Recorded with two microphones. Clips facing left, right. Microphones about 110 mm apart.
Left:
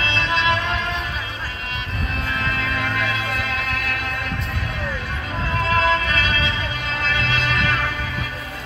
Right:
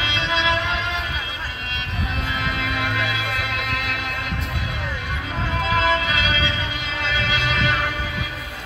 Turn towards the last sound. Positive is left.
turn(degrees=-10)  # may be behind; listen again after turning